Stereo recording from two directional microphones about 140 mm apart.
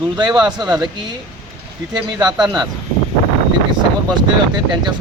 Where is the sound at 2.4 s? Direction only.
30° right (ahead or behind).